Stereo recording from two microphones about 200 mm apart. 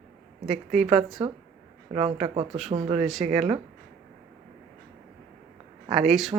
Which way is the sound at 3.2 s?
30° right (ahead or behind).